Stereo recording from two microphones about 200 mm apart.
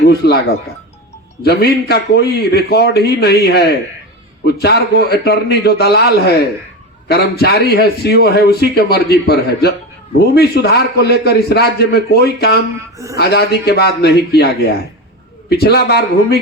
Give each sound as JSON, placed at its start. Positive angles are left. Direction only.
{"t": 0.0, "sound": "a man's voice", "side_deg": 55}